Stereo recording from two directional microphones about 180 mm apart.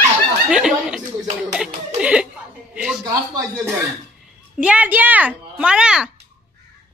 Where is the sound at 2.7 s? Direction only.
5° right (ahead or behind).